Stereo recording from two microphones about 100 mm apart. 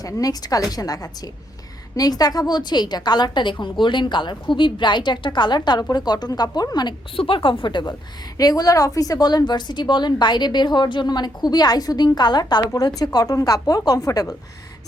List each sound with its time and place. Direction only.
0.0 s a woman's voice: 40° left (ahead or behind)
7.2 s speech: 60° left (ahead or behind)
8.4 s a woman's voice: 40° left (ahead or behind)